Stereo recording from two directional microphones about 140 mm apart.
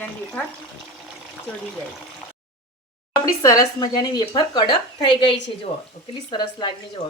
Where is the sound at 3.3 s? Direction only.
25° left (ahead or behind).